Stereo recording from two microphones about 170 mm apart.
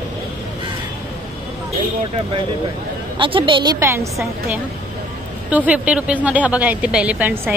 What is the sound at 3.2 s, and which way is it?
Speech, 30° right (ahead or behind).